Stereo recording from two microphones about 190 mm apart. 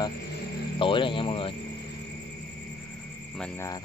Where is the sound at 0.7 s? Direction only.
25° left (ahead or behind).